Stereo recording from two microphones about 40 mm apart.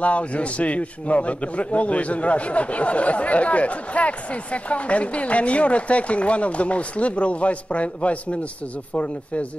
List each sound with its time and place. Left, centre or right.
0.0 s a man's voice: left